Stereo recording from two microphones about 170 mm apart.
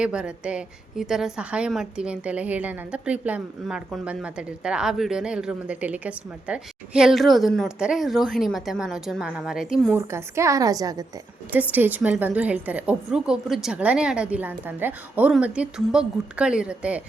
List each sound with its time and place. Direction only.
0.0 s a woman's voice: 5° right (ahead or behind)
10.1 s a woman's voice: 15° right (ahead or behind)
11.5 s a woman's voice: 10° right (ahead or behind)